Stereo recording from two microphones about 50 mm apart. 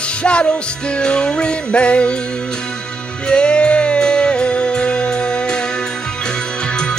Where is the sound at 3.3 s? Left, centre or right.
Left.